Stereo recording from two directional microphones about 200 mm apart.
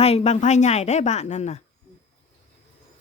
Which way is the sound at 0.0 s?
30° left (ahead or behind).